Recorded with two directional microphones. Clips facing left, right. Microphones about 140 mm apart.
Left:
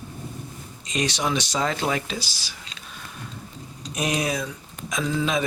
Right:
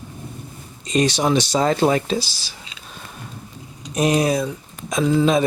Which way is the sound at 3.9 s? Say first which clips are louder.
Right 8 dB; 35° right (ahead or behind).